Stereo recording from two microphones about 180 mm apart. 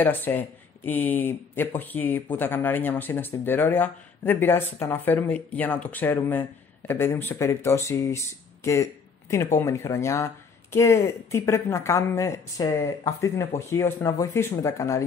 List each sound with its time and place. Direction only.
0.0 s speech: 10° left (ahead or behind)
9.6 s speech: 15° left (ahead or behind)